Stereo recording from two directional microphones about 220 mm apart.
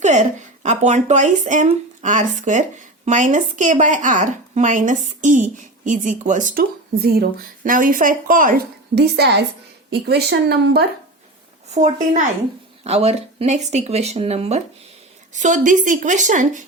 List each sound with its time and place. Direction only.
0.0 s speech: 35° right (ahead or behind)
11.7 s speech: 35° right (ahead or behind)